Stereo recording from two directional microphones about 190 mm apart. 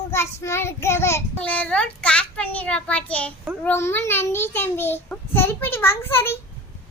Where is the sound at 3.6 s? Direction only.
10° left (ahead or behind).